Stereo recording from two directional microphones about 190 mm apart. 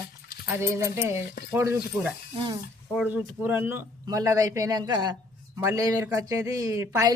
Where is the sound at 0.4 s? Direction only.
10° right (ahead or behind).